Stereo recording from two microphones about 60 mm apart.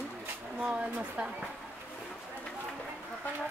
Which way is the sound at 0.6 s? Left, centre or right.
Right.